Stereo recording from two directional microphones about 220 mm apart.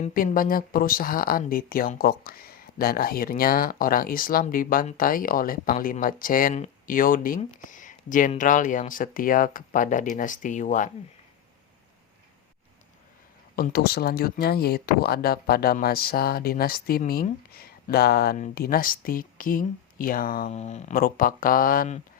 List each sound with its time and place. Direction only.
0.0 s speech: 35° left (ahead or behind)
13.6 s speech: 45° left (ahead or behind)